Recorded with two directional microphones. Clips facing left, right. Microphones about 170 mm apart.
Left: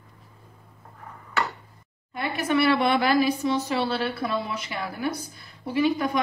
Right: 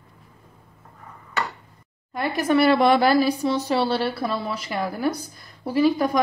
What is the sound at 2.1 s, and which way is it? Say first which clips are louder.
Speech: right 4 dB; 40° right (ahead or behind).